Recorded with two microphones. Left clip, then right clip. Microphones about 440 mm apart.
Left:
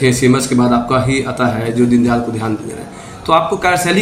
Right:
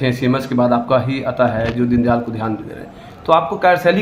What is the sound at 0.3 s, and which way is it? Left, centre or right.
A man's voice, right.